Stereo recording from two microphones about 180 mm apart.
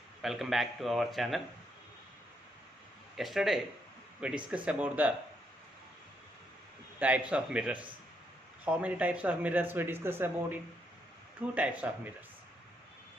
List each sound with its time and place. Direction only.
0.2 s speech: centre (ahead or behind)
3.2 s speech: centre (ahead or behind)
7.0 s speech: 5° right (ahead or behind)